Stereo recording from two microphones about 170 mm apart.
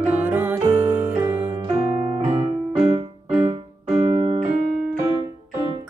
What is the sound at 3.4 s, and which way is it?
Music, 30° right (ahead or behind).